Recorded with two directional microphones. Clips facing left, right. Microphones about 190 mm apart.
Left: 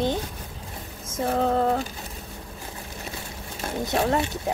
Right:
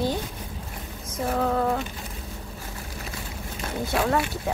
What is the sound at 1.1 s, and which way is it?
Music, 35° left (ahead or behind).